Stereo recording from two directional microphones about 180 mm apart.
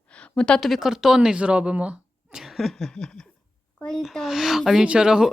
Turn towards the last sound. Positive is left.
turn(degrees=-5)  # may be behind; listen again after turning